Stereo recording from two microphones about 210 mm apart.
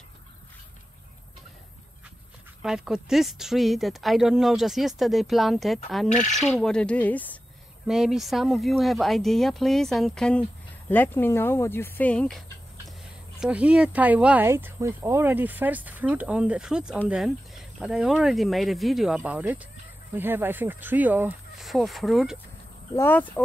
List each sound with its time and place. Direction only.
2.6 s speech: centre (ahead or behind)
6.0 s speech: 35° left (ahead or behind)
6.3 s speech: centre (ahead or behind)
22.9 s speech: 10° left (ahead or behind)